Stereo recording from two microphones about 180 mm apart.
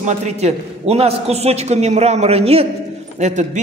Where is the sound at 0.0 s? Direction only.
40° right (ahead or behind).